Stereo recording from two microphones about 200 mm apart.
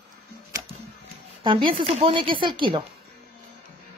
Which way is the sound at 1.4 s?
25° right (ahead or behind).